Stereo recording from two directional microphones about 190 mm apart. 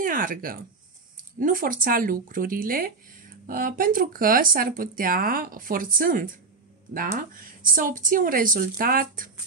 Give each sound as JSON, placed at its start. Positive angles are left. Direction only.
{"t": 0.0, "sound": "speech", "side_deg": -45}